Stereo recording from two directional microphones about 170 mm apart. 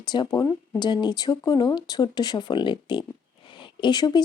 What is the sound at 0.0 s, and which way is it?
Speech, 25° left (ahead or behind).